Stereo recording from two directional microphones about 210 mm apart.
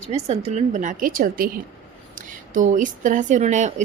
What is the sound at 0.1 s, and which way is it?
Speech, 30° right (ahead or behind).